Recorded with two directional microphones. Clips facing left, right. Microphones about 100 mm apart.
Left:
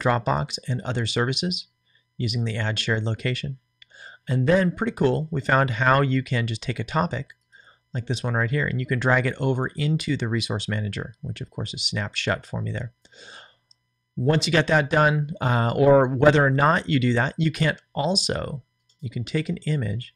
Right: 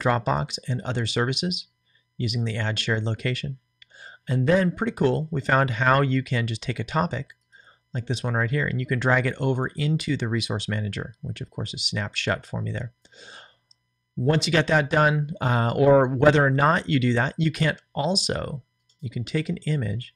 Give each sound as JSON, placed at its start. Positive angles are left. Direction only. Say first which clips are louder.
{"t": 0.0, "sound": "speech", "louder": "left 1 dB", "side_deg": 15}